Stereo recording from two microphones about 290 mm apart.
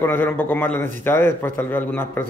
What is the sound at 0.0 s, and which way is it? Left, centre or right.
A man's voice, centre.